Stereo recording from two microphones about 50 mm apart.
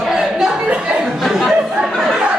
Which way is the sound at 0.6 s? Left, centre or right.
Right.